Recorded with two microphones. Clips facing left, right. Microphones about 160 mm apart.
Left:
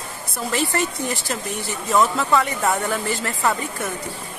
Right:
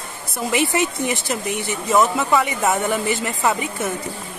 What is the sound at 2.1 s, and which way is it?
Speech, 5° right (ahead or behind).